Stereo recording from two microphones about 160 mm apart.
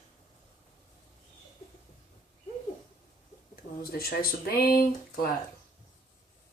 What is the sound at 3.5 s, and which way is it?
Speech, 70° left (ahead or behind).